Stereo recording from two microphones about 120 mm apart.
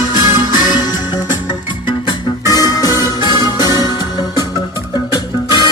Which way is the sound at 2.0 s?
35° left (ahead or behind).